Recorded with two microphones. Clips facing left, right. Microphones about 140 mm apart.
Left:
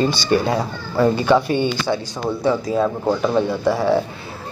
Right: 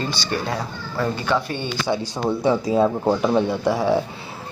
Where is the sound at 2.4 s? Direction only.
25° right (ahead or behind).